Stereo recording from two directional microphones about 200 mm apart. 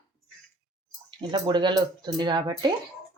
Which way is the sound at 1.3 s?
20° right (ahead or behind).